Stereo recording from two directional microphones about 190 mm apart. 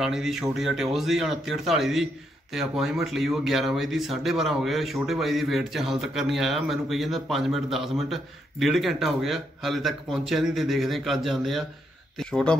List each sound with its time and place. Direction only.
0.0 s speech: centre (ahead or behind)